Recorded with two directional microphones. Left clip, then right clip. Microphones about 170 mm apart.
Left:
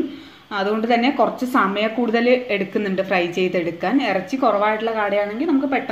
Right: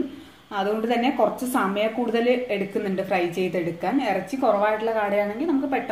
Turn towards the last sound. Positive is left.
turn(degrees=40)  # may be behind; listen again after turning